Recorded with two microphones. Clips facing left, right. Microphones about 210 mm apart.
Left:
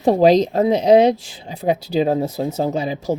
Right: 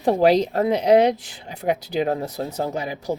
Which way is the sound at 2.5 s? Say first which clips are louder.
Left 5 dB; 25° left (ahead or behind).